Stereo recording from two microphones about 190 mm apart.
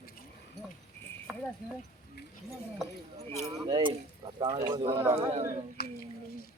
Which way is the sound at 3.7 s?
20° right (ahead or behind).